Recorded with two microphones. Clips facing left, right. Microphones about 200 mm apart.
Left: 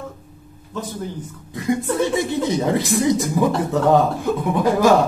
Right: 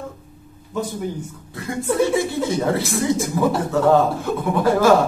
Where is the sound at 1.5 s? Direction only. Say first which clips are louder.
Left 2 dB; 20° left (ahead or behind).